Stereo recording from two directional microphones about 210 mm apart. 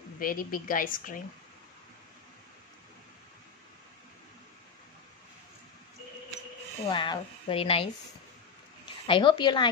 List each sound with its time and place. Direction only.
0.2 s a woman's voice: 45° left (ahead or behind)
6.9 s a woman's voice: 20° left (ahead or behind)